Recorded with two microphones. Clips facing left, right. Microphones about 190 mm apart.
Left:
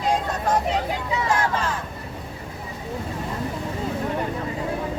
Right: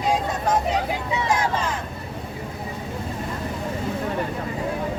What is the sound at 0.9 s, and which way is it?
Vehicle, 15° right (ahead or behind).